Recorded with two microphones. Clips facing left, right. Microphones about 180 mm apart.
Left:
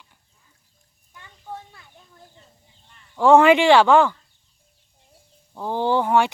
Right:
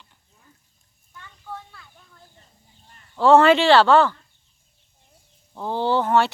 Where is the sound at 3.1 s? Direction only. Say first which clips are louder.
Left 1 dB; 15° left (ahead or behind).